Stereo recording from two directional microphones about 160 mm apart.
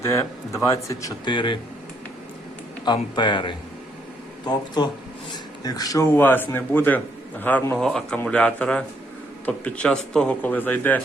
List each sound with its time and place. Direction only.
0.0 s speech: 15° left (ahead or behind)
2.8 s a man's voice: 25° left (ahead or behind); by 11.0 s 10° left (ahead or behind)